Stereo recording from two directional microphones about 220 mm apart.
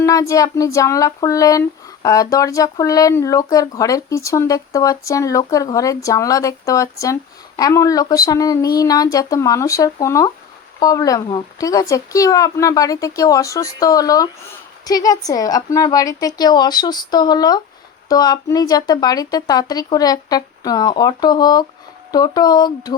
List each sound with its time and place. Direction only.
0.0 s speech: 15° left (ahead or behind)